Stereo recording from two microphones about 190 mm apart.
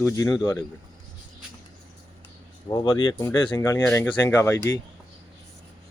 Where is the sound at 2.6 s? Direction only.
20° left (ahead or behind).